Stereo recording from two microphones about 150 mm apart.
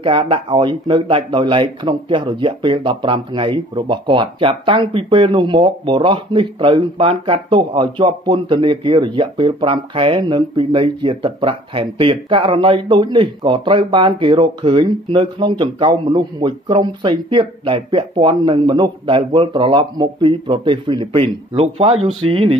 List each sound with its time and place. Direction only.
0.0 s speech: 35° right (ahead or behind)